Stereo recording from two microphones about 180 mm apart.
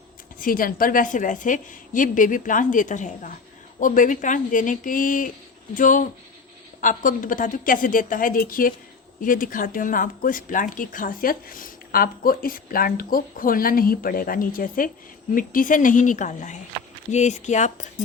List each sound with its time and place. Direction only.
0.3 s speech: 50° left (ahead or behind)